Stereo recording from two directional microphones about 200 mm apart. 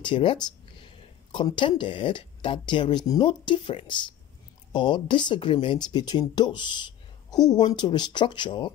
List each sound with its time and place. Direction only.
0.0 s speech: 25° left (ahead or behind)